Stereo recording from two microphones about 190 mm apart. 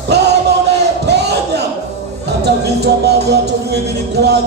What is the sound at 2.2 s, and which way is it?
Music, 60° right (ahead or behind).